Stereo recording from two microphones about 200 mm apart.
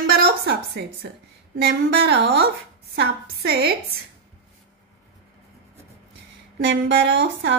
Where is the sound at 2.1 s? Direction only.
50° right (ahead or behind).